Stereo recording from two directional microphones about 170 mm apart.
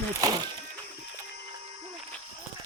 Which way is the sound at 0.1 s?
20° right (ahead or behind).